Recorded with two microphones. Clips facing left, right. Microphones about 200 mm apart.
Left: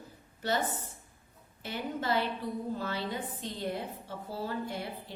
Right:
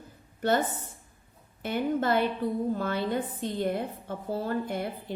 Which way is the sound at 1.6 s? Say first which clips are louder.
Right 7 dB; 55° right (ahead or behind).